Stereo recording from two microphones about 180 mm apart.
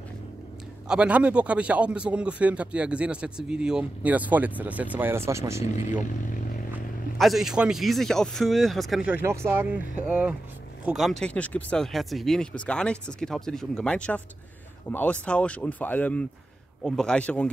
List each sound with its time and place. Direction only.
0.8 s speech: 5° right (ahead or behind)
5.6 s speech: 40° left (ahead or behind)
7.2 s speech: centre (ahead or behind)